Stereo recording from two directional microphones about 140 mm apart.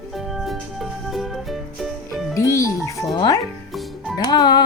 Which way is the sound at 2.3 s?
25° left (ahead or behind).